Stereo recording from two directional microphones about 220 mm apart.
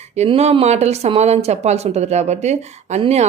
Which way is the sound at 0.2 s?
30° right (ahead or behind).